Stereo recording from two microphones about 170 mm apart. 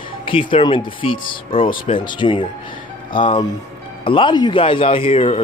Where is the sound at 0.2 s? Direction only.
30° left (ahead or behind).